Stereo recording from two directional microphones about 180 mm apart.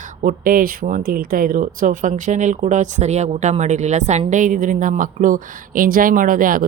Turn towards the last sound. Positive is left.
turn(degrees=-50)  # may be behind; listen again after turning